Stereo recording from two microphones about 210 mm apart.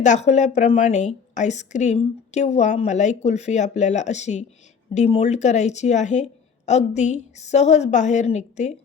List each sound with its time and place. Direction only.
0.0 s a woman's voice: 35° left (ahead or behind)